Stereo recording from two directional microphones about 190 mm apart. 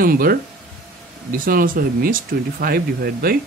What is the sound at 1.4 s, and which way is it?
Speech, 50° right (ahead or behind).